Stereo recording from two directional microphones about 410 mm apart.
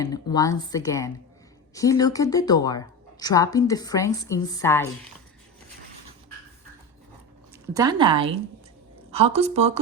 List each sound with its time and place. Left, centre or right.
0.0 s a woman's voice: centre
7.7 s speech: centre